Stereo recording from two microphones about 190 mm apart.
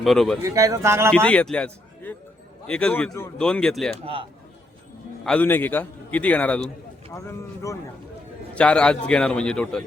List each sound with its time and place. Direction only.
0.0 s a man's voice: centre (ahead or behind)
0.4 s a man's voice: 15° right (ahead or behind)
1.1 s a man's voice: 5° left (ahead or behind)
4.0 s a man's voice: 30° right (ahead or behind)
5.2 s a man's voice: 10° left (ahead or behind)
8.5 s a man's voice: 5° left (ahead or behind)